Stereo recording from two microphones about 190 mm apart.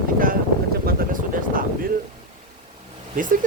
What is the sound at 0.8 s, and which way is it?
Vehicle, 45° right (ahead or behind).